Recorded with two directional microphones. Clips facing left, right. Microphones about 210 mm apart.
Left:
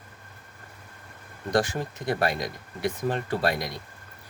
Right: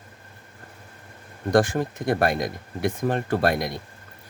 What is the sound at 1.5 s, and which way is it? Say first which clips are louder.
Speech: right 5 dB; 50° right (ahead or behind).